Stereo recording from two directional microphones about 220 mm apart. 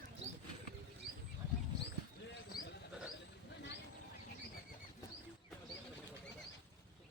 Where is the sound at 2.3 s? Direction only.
50° left (ahead or behind).